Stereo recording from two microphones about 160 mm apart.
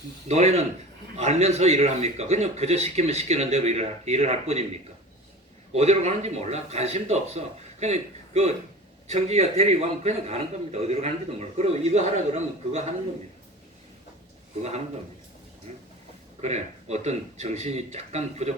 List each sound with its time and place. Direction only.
0.3 s a man's voice: 40° right (ahead or behind)
5.7 s a man's voice: 45° right (ahead or behind)
16.4 s a man's voice: 45° right (ahead or behind)